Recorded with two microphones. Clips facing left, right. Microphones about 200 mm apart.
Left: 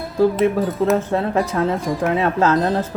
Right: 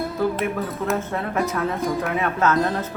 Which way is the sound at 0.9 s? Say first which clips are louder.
Left 5 dB; 30° left (ahead or behind).